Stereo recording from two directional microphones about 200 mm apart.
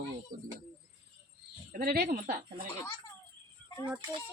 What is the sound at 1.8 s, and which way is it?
Speech, 50° right (ahead or behind).